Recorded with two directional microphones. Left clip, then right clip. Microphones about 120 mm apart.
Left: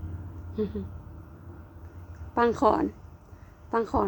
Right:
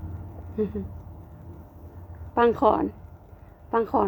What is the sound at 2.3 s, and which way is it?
Speech, 5° left (ahead or behind).